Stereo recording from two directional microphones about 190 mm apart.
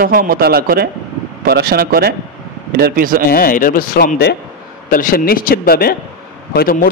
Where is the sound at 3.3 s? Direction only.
50° left (ahead or behind).